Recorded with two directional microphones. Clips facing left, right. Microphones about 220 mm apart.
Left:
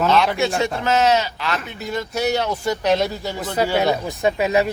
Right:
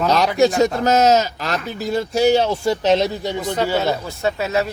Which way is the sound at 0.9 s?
40° right (ahead or behind).